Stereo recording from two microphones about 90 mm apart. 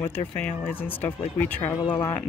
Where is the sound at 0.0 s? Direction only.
25° left (ahead or behind).